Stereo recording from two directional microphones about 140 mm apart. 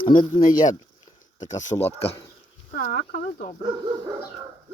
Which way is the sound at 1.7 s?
25° left (ahead or behind).